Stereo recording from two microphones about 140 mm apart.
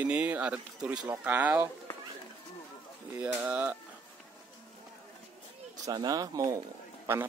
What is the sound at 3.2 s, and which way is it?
Speech, 15° right (ahead or behind).